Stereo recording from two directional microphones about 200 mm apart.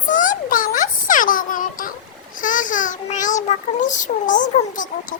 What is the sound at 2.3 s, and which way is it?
Child singing, 40° left (ahead or behind).